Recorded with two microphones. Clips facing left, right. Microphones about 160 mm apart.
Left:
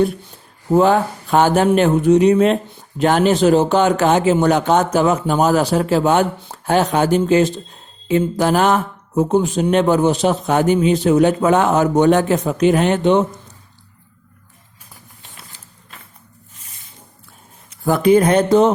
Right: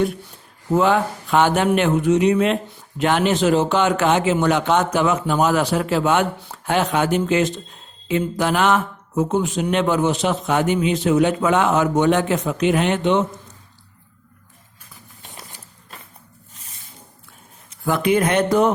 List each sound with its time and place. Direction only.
0.7 s speech: 35° left (ahead or behind)
17.8 s speech: 35° left (ahead or behind)